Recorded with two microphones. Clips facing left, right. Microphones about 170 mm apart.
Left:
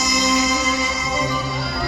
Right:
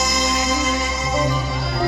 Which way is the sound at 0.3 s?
50° right (ahead or behind).